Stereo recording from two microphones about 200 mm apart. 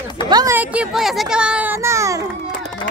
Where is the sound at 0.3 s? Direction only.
20° right (ahead or behind).